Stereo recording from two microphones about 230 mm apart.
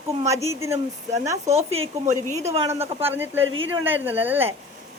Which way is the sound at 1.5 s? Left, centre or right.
Right.